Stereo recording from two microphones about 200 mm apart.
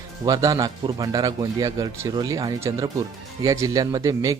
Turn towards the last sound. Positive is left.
turn(degrees=-15)  # may be behind; listen again after turning